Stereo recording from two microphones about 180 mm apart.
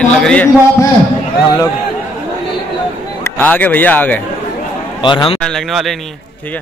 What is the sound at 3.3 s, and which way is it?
Speech, 10° left (ahead or behind).